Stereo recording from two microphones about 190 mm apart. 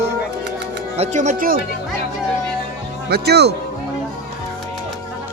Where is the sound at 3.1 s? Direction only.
60° right (ahead or behind).